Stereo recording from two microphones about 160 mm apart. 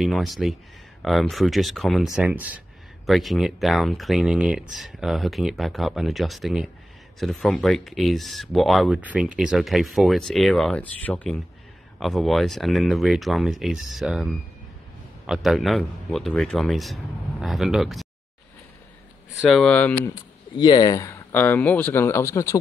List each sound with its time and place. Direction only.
0.0 s speech: centre (ahead or behind)
19.5 s speech: 5° left (ahead or behind)
20.5 s speech: 25° left (ahead or behind)